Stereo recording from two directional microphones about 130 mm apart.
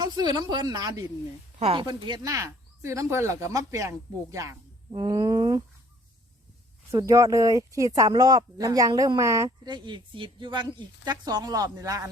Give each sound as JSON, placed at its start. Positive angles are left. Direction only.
{"t": 0.0, "sound": "speech", "side_deg": -35}
{"t": 1.5, "sound": "speech", "side_deg": -50}
{"t": 1.8, "sound": "speech", "side_deg": -35}
{"t": 4.9, "sound": "speech", "side_deg": -35}
{"t": 6.9, "sound": "speech", "side_deg": -25}
{"t": 9.6, "sound": "speech", "side_deg": -35}